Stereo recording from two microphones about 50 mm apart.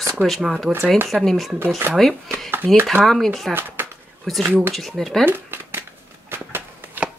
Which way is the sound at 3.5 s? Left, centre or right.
Right.